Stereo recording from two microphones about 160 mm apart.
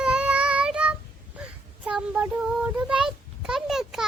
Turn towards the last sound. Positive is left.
turn(degrees=-5)  # may be behind; listen again after turning